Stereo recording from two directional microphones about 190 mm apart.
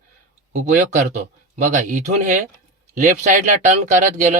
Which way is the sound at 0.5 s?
40° right (ahead or behind).